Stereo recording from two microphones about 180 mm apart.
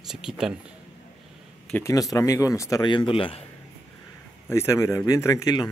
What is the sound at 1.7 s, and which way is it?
Speech, 15° left (ahead or behind).